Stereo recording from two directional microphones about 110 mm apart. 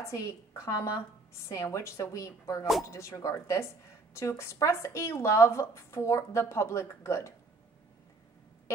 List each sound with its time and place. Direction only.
0.0 s a woman's voice: 30° left (ahead or behind)